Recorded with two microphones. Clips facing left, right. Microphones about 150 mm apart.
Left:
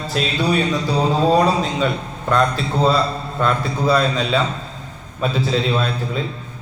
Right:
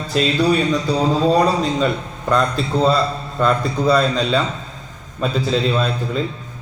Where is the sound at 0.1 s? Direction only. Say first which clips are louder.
Right 4 dB; centre (ahead or behind).